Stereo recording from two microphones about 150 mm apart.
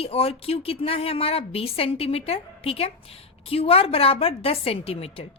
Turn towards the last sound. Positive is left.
turn(degrees=40)  # may be behind; listen again after turning